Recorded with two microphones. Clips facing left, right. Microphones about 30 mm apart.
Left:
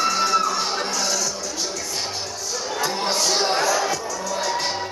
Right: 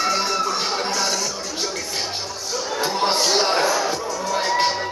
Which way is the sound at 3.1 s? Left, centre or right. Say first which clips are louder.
Right 2 dB; right.